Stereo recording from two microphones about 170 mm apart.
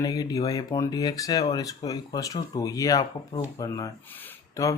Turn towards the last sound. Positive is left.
turn(degrees=15)  # may be behind; listen again after turning